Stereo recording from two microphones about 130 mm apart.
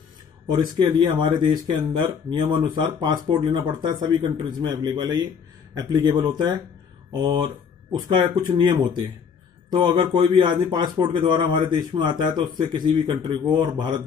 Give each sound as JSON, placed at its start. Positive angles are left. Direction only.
{"t": 0.5, "sound": "speech", "side_deg": -35}